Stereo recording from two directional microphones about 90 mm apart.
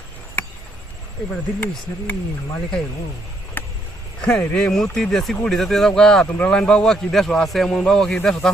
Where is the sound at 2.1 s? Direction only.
15° left (ahead or behind).